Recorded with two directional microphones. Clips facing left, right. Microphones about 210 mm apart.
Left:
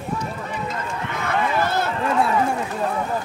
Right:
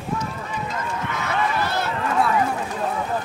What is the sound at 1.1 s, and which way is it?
Run, 50° left (ahead or behind).